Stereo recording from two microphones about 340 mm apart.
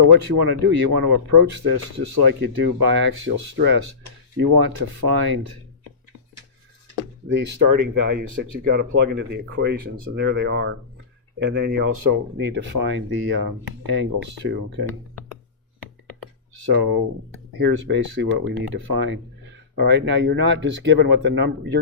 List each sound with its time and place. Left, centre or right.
0.0 s speech: right
7.5 s speech: right
8.5 s speech: right
12.0 s speech: right
16.6 s speech: right